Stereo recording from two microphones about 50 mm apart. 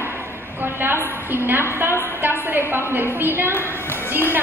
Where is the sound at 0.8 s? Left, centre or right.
Right.